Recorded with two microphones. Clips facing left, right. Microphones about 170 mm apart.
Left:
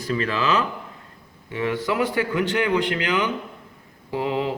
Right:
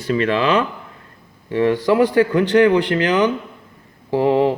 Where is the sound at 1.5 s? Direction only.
35° right (ahead or behind).